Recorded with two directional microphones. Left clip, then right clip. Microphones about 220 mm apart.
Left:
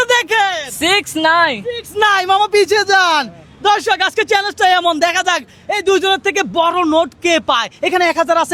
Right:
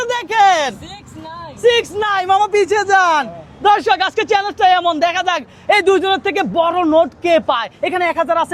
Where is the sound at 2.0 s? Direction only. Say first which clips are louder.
Left 7 dB; 25° left (ahead or behind).